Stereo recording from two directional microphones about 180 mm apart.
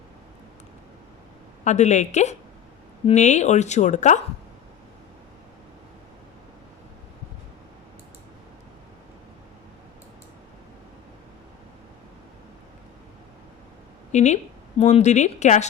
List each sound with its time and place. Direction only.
1.6 s speech: 40° left (ahead or behind)
14.1 s a woman's voice: 40° left (ahead or behind)